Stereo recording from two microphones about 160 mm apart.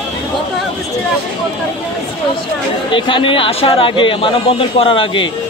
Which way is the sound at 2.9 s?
30° left (ahead or behind).